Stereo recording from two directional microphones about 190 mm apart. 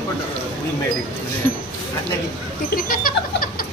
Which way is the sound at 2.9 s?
50° left (ahead or behind).